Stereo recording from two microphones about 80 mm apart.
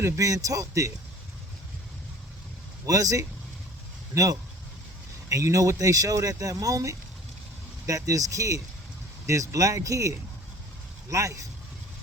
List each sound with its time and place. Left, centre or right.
0.0 s speech: right
2.8 s speech: right